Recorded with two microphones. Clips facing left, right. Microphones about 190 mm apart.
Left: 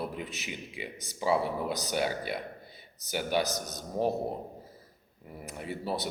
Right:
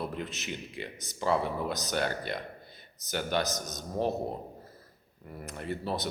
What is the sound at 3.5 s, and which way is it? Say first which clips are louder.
Speech: even; 35° left (ahead or behind).